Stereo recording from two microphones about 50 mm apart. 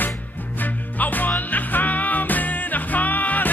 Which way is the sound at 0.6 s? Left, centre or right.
Left.